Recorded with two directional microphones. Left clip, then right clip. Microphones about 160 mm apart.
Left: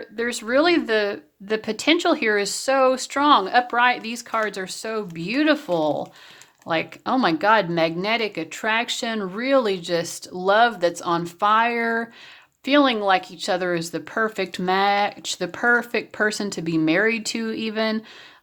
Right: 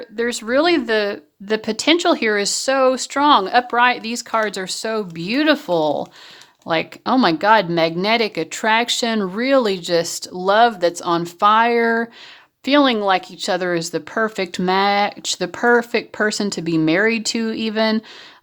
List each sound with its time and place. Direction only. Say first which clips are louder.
0.2 s speech: right 3 dB; 25° right (ahead or behind)